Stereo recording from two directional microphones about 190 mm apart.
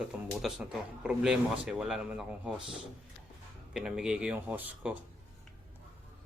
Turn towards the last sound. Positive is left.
turn(degrees=-10)  # may be behind; listen again after turning